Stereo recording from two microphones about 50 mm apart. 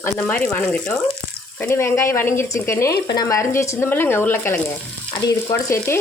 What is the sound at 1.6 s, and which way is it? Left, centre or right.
Speech, left.